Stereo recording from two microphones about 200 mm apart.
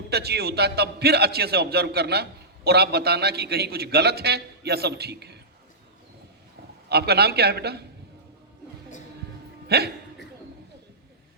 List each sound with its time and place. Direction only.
0.1 s a man's voice: 55° right (ahead or behind)
6.8 s a man's voice: 55° right (ahead or behind)
9.6 s speech: 55° right (ahead or behind)